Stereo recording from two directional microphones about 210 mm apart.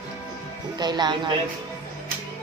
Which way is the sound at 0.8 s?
20° right (ahead or behind).